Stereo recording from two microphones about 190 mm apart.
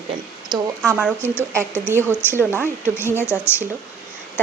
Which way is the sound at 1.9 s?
10° right (ahead or behind).